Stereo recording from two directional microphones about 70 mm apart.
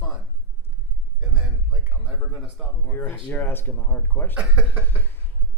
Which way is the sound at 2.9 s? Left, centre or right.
Left.